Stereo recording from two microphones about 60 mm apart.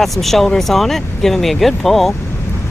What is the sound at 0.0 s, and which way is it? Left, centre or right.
Speech, centre.